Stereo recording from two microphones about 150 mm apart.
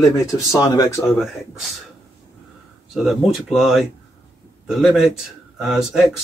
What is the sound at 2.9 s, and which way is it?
A man's voice, 5° right (ahead or behind).